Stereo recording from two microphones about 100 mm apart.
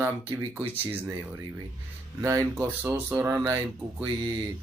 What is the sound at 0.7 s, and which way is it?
Speech, 20° right (ahead or behind).